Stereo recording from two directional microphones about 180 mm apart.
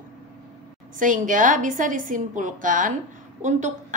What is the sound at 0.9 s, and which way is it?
A woman's voice, 45° right (ahead or behind).